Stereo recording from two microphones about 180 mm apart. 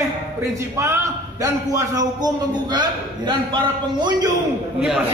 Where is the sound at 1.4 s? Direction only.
20° right (ahead or behind).